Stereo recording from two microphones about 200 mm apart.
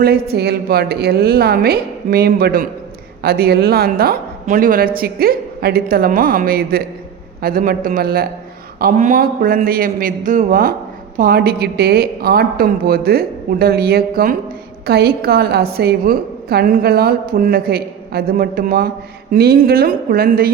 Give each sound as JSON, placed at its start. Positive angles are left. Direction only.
{"t": 0.0, "sound": "a woman's voice", "side_deg": -50}